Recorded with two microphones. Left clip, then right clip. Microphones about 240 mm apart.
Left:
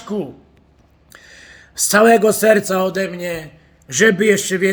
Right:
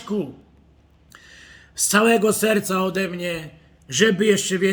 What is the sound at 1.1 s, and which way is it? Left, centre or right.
A man's voice, centre.